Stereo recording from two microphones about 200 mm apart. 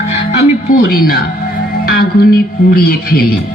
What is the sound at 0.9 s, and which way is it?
Speech, 50° left (ahead or behind).